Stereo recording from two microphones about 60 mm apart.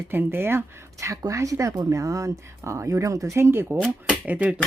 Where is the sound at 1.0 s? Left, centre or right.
Right.